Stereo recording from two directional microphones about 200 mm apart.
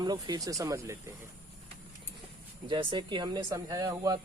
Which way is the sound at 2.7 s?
25° right (ahead or behind).